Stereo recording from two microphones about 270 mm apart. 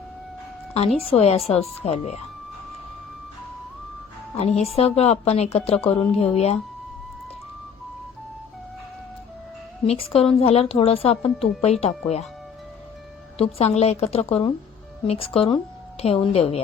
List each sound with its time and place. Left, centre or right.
1.1 s speech: left
4.4 s speech: left
9.8 s speech: left
11.2 s a woman's voice: centre
11.6 s speech: left
13.4 s a woman's voice: left